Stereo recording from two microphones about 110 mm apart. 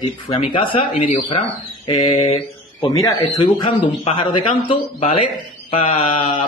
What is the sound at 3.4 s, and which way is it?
Speech, 45° left (ahead or behind).